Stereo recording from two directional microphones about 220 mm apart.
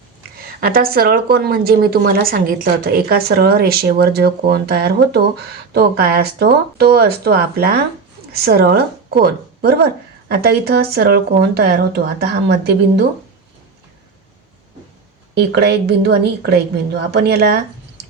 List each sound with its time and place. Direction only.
0.4 s speech: 40° right (ahead or behind)
15.4 s speech: 50° right (ahead or behind)